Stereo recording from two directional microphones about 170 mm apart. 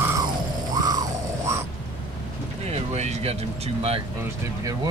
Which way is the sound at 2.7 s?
40° right (ahead or behind).